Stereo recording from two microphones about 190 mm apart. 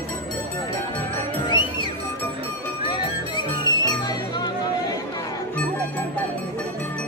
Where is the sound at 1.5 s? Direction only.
25° left (ahead or behind).